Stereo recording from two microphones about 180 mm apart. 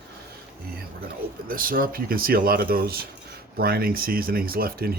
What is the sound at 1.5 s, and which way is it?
Speech, 50° right (ahead or behind).